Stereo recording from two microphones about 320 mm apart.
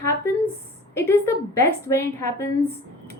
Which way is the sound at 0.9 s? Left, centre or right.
Centre.